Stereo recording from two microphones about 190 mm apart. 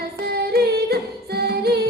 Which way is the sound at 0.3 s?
55° right (ahead or behind).